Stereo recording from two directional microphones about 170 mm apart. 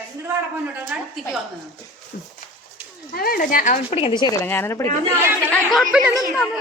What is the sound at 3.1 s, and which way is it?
Speech, 60° left (ahead or behind).